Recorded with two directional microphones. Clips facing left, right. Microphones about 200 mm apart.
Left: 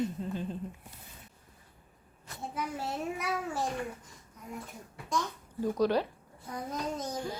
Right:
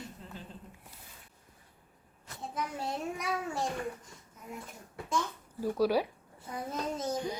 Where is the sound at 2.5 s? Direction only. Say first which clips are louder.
Even; 5° left (ahead or behind).